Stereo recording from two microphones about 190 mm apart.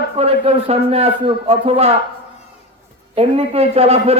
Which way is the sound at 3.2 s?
35° right (ahead or behind).